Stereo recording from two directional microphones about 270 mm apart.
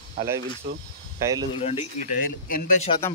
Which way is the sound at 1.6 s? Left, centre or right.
Left.